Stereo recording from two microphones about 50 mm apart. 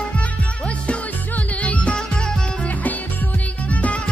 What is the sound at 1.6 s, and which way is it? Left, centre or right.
Music, left.